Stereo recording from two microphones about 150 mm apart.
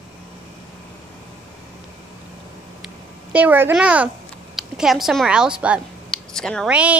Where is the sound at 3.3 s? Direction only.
10° right (ahead or behind); by 6.7 s 5° left (ahead or behind).